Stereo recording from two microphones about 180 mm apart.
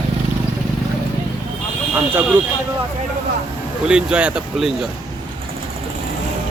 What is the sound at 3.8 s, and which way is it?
Speech, 5° right (ahead or behind).